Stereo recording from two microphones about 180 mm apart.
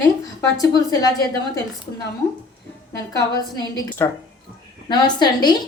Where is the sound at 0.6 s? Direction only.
20° left (ahead or behind).